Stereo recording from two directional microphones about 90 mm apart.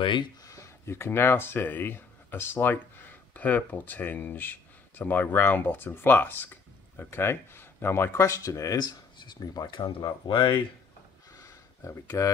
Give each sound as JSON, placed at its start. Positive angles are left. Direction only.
{"t": 0.0, "sound": "speech", "side_deg": 60}
{"t": 0.4, "sound": "speech", "side_deg": 35}
{"t": 9.7, "sound": "speech", "side_deg": 70}
{"t": 11.3, "sound": "a sound", "side_deg": 35}